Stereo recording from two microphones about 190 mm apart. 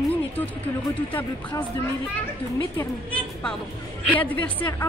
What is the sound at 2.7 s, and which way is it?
A woman's voice, 5° left (ahead or behind).